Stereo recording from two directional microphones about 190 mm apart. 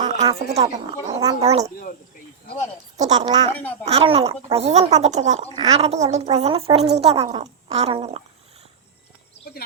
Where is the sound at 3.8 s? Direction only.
30° right (ahead or behind).